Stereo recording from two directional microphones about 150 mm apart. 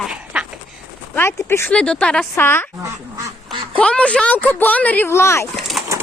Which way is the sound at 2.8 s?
20° right (ahead or behind).